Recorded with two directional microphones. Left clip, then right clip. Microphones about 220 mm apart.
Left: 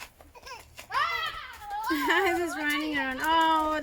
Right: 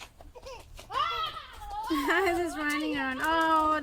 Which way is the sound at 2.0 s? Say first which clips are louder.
Left 2 dB; 5° left (ahead or behind).